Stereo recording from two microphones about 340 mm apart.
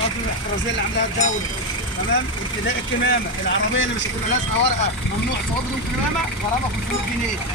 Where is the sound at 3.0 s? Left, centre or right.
Left.